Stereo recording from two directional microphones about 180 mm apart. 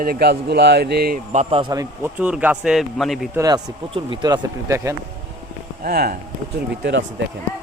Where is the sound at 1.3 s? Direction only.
35° right (ahead or behind).